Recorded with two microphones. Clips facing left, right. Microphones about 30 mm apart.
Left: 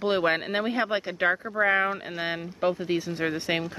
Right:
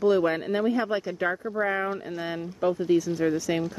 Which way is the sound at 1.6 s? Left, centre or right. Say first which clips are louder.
Left 4 dB; left.